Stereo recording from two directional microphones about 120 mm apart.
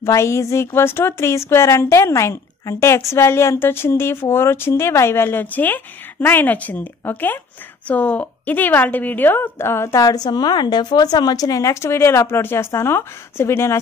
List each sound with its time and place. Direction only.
0.0 s a woman's voice: 25° left (ahead or behind)
10.0 s speech: 35° left (ahead or behind)